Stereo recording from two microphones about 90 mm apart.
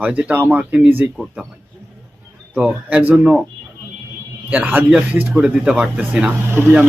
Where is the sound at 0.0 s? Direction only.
15° right (ahead or behind).